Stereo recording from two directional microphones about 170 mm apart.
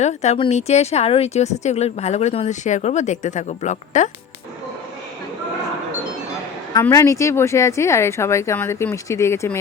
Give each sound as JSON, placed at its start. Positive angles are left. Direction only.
{"t": 0.0, "sound": "speech", "side_deg": 40}
{"t": 6.9, "sound": "speech", "side_deg": 20}